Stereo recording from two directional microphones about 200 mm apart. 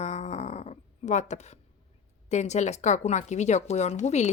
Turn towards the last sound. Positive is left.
turn(degrees=35)  # may be behind; listen again after turning